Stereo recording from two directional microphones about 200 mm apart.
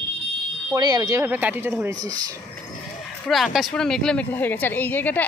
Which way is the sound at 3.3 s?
Centre (ahead or behind).